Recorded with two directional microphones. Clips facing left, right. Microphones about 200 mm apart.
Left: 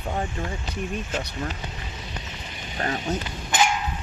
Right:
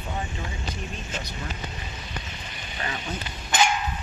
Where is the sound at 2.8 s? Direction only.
45° left (ahead or behind).